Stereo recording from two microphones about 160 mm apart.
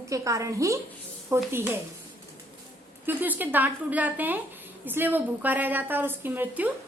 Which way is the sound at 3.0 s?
10° right (ahead or behind).